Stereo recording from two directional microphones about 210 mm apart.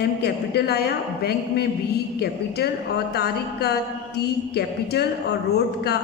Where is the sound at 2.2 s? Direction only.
50° left (ahead or behind).